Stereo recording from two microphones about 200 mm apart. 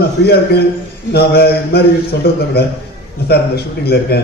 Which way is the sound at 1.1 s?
55° left (ahead or behind).